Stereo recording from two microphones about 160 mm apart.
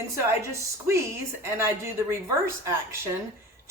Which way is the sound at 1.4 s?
15° right (ahead or behind).